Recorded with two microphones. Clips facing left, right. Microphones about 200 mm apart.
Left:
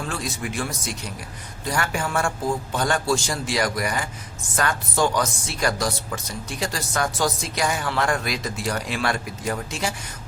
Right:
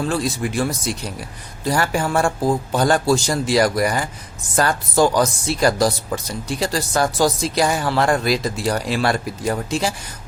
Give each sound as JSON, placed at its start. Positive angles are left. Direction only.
{"t": 0.1, "sound": "speech", "side_deg": -35}
{"t": 1.6, "sound": "speech", "side_deg": -35}